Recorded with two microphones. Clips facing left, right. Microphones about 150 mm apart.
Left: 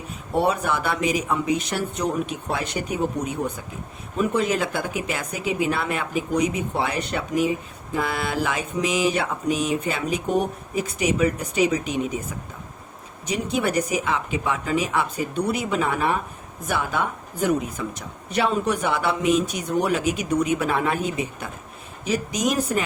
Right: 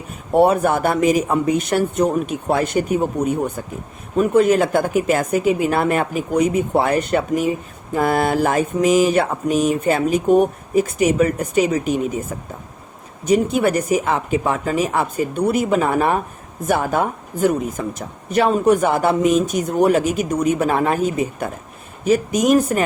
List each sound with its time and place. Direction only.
0.3 s speech: 50° right (ahead or behind)